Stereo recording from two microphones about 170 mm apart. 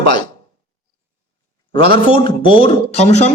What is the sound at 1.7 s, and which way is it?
A man's voice, 30° left (ahead or behind).